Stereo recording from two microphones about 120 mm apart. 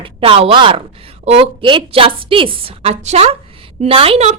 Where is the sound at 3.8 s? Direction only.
50° right (ahead or behind).